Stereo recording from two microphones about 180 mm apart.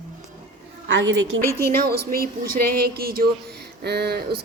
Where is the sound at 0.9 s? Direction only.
90° right.